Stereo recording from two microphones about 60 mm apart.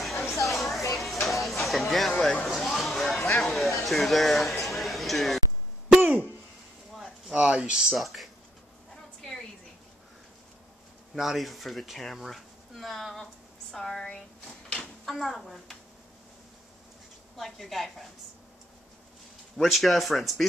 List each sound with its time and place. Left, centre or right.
0.0 s a sound: centre
5.9 s throat clearing: right
6.9 s a sound: centre
7.3 s speech: centre
7.9 s speech: centre
8.9 s a sound: centre
11.1 s speech: centre
15.0 s speech: centre
17.4 s speech: centre
19.5 s speech: centre